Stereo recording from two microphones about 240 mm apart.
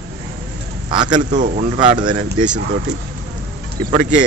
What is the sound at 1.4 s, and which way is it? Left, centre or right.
Speech, right.